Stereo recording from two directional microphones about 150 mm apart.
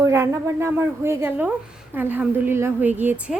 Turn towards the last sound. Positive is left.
turn(degrees=-10)  # may be behind; listen again after turning